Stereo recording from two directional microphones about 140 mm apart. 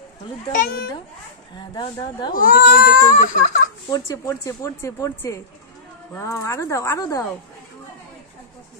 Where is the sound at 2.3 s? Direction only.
90° left; by 3.7 s 70° left (ahead or behind).